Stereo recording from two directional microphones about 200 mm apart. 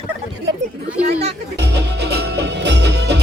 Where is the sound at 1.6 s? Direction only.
55° right (ahead or behind).